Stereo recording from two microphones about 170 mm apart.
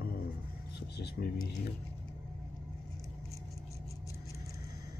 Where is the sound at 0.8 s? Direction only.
75° left (ahead or behind).